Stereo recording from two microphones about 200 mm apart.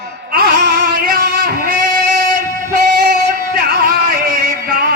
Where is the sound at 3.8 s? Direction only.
45° right (ahead or behind).